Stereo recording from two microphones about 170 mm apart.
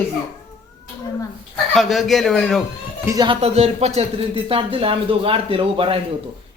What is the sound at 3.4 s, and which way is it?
Speech, 35° right (ahead or behind).